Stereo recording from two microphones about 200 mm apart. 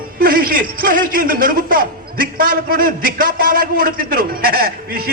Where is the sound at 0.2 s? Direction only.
45° right (ahead or behind).